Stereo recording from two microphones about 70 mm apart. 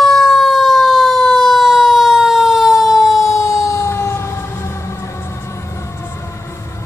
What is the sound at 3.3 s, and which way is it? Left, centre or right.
Fire engine, left.